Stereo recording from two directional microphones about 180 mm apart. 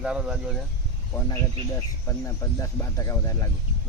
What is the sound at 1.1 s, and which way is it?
Speech, 15° left (ahead or behind).